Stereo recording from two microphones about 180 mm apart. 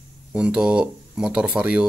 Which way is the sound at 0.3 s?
5° right (ahead or behind).